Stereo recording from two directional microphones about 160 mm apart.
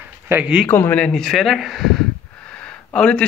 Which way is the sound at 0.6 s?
10° left (ahead or behind).